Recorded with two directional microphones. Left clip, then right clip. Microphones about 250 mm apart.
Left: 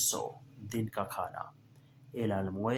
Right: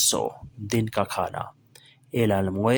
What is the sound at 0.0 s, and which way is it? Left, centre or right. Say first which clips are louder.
Speech: right 10 dB; right.